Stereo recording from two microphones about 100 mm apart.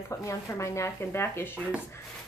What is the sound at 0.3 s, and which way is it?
A woman's voice, 30° left (ahead or behind).